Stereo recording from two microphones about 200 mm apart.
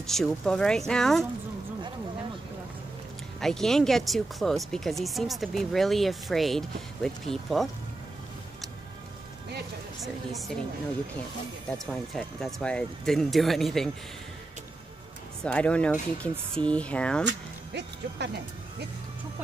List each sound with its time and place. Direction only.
0.0 s speech: centre (ahead or behind)
3.3 s speech: centre (ahead or behind)
9.9 s speech: centre (ahead or behind)
11.8 s speech: centre (ahead or behind)
15.4 s speech: 5° left (ahead or behind)
17.2 s speech: 60° right (ahead or behind)